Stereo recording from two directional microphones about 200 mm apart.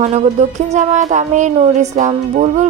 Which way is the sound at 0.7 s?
35° right (ahead or behind).